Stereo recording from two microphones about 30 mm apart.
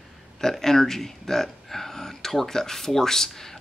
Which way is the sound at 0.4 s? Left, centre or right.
Centre.